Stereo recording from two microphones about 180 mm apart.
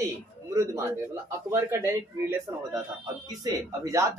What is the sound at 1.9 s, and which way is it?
Speech, 15° right (ahead or behind).